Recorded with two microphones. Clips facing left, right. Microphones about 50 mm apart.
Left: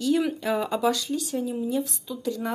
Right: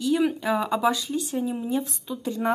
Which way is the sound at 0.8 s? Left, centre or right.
Centre.